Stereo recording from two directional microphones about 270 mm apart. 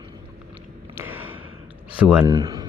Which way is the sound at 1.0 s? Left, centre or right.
Centre.